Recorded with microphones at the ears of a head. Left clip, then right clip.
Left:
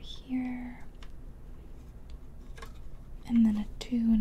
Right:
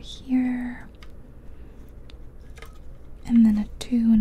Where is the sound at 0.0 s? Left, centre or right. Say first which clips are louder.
Right 10 dB; right.